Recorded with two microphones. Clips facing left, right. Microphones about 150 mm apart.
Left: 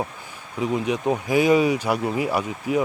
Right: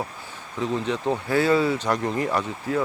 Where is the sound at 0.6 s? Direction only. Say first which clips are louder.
Left 2 dB; 10° left (ahead or behind).